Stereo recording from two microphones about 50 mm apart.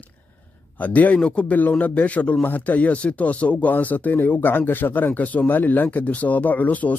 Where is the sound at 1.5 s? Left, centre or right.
Left.